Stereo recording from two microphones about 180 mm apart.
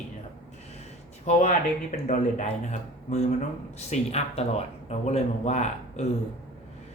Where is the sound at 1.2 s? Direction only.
45° left (ahead or behind).